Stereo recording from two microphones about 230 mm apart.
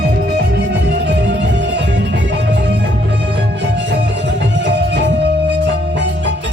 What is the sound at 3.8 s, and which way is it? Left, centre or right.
Music, right.